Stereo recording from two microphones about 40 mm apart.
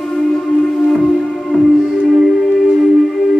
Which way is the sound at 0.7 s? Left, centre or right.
Centre.